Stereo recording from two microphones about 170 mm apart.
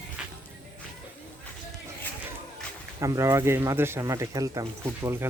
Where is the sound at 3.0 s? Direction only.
20° right (ahead or behind).